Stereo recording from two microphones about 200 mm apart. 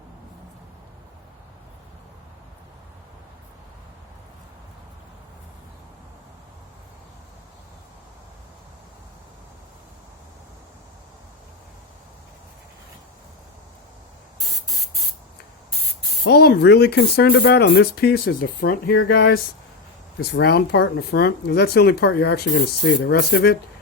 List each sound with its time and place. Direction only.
16.2 s speech: 55° left (ahead or behind)